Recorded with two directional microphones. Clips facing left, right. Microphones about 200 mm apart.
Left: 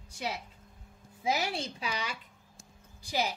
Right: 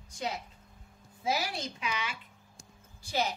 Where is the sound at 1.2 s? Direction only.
25° left (ahead or behind).